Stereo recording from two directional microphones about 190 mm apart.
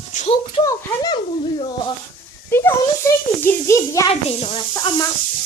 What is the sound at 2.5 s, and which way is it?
A child's voice, 10° left (ahead or behind).